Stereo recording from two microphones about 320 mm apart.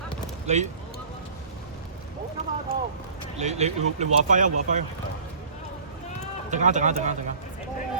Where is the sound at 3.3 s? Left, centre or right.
Right.